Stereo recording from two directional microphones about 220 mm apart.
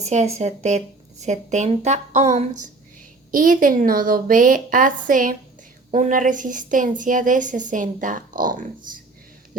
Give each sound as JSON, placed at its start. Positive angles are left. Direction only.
{"t": 0.0, "sound": "a woman's voice", "side_deg": -30}